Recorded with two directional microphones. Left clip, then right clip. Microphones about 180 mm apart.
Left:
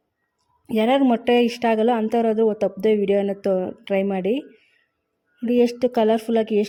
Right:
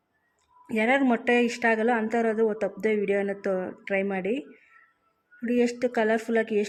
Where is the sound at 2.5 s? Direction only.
40° left (ahead or behind).